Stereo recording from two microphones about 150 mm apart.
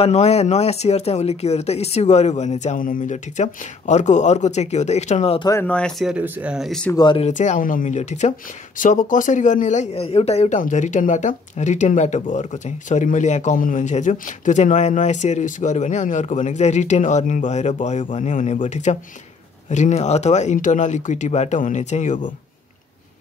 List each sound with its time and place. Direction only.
0.0 s speech: 45° left (ahead or behind)
5.4 s speech: 20° left (ahead or behind)
5.7 s speech: 5° left (ahead or behind)
6.9 s speech: 25° left (ahead or behind)
7.2 s speech: 50° left (ahead or behind)